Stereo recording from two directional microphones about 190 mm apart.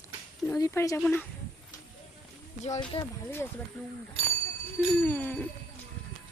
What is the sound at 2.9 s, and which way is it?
Speech, 30° left (ahead or behind).